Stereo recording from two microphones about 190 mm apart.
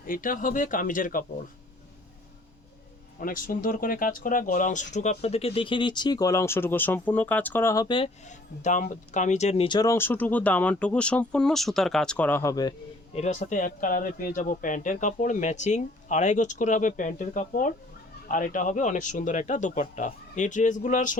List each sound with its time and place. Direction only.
0.1 s speech: 45° left (ahead or behind)
3.2 s speech: 45° left (ahead or behind); by 8.1 s 25° left (ahead or behind)
8.3 s speech: 40° left (ahead or behind); by 12.7 s 20° left (ahead or behind)
13.1 s speech: 35° left (ahead or behind)